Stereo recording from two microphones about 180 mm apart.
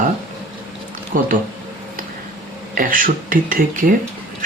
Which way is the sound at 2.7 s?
50° right (ahead or behind).